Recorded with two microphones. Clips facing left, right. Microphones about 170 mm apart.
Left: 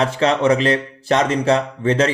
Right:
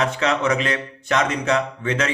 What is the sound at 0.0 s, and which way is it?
Speech, 30° left (ahead or behind).